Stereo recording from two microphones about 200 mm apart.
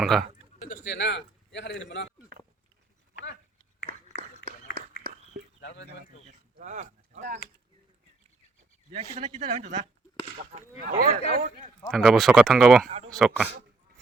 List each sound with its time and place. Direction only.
0.0 s speech: centre (ahead or behind)
0.7 s a man's voice: 60° left (ahead or behind)
4.6 s a sound: 45° left (ahead or behind)
5.5 s a sound: 60° left (ahead or behind)
6.2 s a sound: 40° right (ahead or behind)
7.1 s speech: 55° right (ahead or behind)
8.9 s speech: 30° right (ahead or behind)
10.3 s speech: 45° right (ahead or behind)
11.9 s speech: centre (ahead or behind)